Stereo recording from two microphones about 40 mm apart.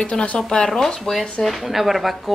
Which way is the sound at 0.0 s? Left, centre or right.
Left.